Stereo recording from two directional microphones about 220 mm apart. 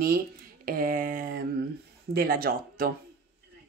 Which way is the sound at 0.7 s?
40° right (ahead or behind).